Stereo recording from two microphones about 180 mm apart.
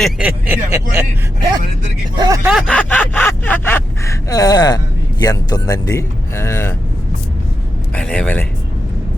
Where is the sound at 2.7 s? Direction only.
10° left (ahead or behind).